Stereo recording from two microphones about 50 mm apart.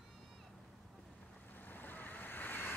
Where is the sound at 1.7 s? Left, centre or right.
Left.